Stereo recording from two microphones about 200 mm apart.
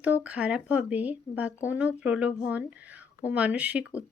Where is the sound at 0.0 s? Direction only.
5° right (ahead or behind).